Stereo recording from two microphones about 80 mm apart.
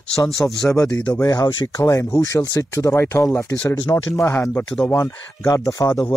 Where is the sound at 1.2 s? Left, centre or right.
Left.